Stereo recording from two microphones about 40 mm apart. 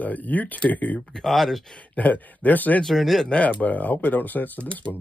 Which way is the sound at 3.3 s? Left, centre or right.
Left.